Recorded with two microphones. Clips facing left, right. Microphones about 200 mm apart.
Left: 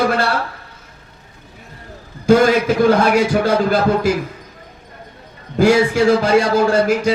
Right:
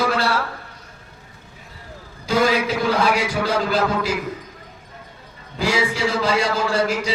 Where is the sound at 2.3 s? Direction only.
50° left (ahead or behind).